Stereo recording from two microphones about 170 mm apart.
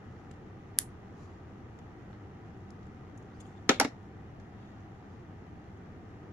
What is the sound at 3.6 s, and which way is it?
Computer keyboard, 15° right (ahead or behind).